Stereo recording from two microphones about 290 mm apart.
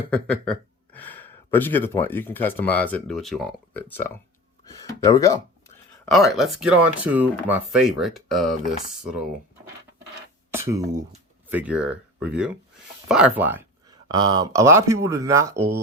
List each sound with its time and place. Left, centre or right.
0.1 s speech: centre
6.1 s speech: centre
10.5 s speech: centre